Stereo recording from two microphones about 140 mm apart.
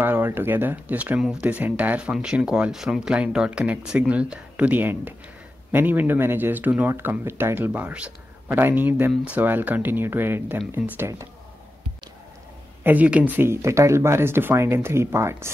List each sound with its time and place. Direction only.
0.0 s speech: 15° right (ahead or behind)
12.8 s speech: 10° right (ahead or behind)